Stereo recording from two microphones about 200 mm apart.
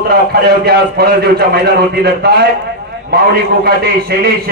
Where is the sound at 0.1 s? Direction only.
50° right (ahead or behind).